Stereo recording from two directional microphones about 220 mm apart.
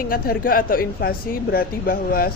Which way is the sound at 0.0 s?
40° left (ahead or behind).